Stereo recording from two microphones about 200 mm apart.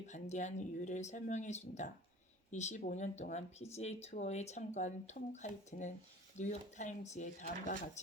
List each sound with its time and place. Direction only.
0.1 s speech: 35° left (ahead or behind)